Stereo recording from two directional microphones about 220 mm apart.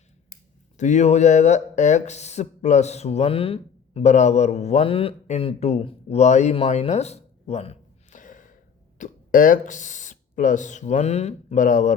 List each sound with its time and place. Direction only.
0.8 s speech: 35° left (ahead or behind)